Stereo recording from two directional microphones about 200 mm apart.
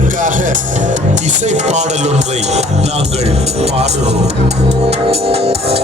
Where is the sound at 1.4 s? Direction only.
35° right (ahead or behind).